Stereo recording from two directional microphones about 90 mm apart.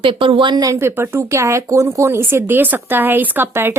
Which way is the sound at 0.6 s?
35° right (ahead or behind).